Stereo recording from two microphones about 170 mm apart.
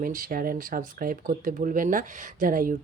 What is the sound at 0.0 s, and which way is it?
Speech, 55° right (ahead or behind).